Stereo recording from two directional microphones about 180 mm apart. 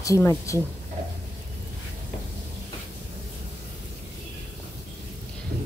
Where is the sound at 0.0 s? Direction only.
15° left (ahead or behind).